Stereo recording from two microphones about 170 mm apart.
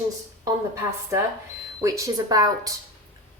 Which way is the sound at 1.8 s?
20° right (ahead or behind).